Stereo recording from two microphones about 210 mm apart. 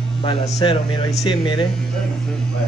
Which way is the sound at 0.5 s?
25° left (ahead or behind).